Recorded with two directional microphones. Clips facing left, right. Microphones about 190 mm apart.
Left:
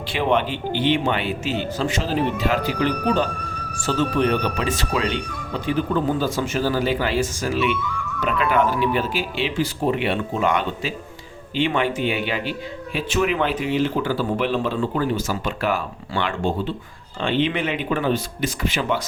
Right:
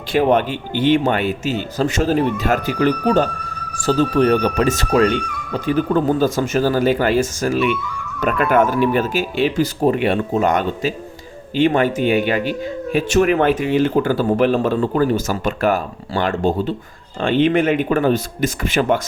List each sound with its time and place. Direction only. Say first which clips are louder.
0.1 s speech: right 6 dB; 45° right (ahead or behind)
3.8 s speech: right 5 dB; 35° right (ahead or behind)